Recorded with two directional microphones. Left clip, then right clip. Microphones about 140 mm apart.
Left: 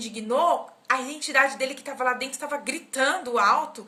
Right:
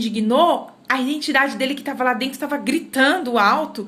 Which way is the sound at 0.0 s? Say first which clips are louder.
Right 7 dB; 25° left (ahead or behind).